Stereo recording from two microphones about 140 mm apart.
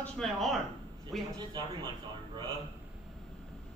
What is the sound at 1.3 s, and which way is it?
Speech, 30° right (ahead or behind).